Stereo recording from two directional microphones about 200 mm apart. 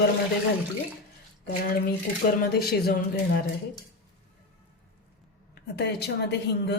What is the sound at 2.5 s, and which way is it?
Speech, 50° left (ahead or behind).